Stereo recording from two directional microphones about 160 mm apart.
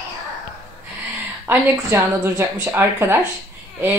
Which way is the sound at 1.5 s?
15° right (ahead or behind).